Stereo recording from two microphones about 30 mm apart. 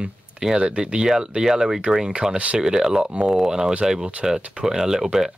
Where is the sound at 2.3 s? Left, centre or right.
Right.